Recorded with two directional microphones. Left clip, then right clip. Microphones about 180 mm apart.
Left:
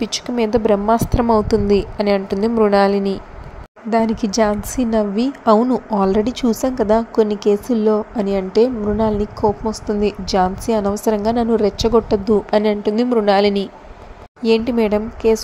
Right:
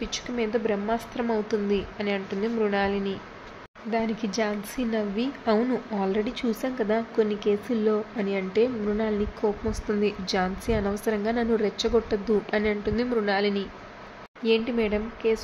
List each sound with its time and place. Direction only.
0.0 s a woman's voice: 40° left (ahead or behind)